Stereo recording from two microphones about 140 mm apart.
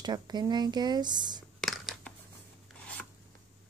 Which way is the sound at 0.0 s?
30° right (ahead or behind).